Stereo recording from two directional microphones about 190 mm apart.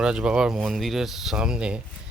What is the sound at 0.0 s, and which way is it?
Speech, 5° right (ahead or behind).